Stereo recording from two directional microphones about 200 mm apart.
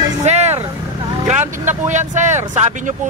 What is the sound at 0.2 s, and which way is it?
Vehicle, 35° right (ahead or behind).